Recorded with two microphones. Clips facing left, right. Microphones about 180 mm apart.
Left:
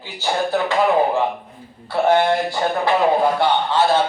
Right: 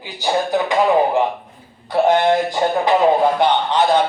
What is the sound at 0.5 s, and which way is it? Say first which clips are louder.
Speech: right 1 dB; 15° right (ahead or behind).